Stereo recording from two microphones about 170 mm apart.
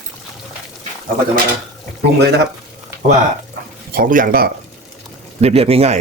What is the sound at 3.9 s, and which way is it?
Speech, 55° right (ahead or behind).